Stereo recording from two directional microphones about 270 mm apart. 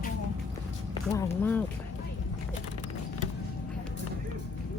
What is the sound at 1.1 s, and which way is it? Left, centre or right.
Speech, centre.